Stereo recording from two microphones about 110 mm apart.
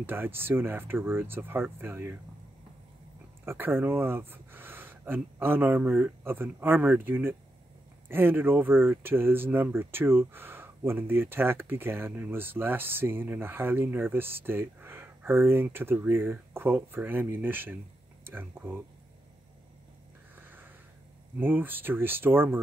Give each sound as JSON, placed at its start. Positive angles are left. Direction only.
{"t": 0.0, "sound": "speech", "side_deg": -20}
{"t": 3.4, "sound": "speech", "side_deg": -20}
{"t": 20.3, "sound": "a sound", "side_deg": -20}
{"t": 21.4, "sound": "speech", "side_deg": -20}